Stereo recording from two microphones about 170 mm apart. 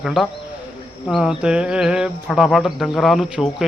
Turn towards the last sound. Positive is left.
turn(degrees=0)  # may be behind; listen again after turning